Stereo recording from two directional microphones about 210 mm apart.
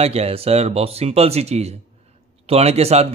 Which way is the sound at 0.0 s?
30° right (ahead or behind).